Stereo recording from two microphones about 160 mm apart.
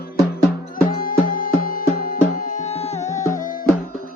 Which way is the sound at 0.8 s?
60° left (ahead or behind).